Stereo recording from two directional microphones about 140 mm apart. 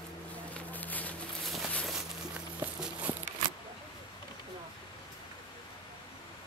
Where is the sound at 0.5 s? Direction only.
10° left (ahead or behind).